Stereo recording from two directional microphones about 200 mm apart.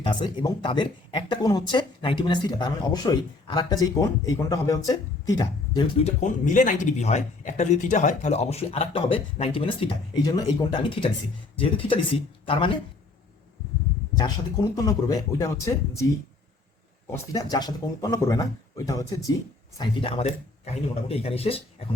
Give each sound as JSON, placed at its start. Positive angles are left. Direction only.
{"t": 0.0, "sound": "speech", "side_deg": 20}
{"t": 6.1, "sound": "speech", "side_deg": 40}
{"t": 14.2, "sound": "speech", "side_deg": 20}
{"t": 17.1, "sound": "speech", "side_deg": 20}